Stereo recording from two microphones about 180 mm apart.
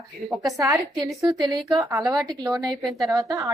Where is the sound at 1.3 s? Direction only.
20° right (ahead or behind).